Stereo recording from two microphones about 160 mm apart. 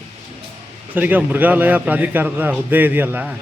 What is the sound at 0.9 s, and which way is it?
A man's voice, 10° right (ahead or behind).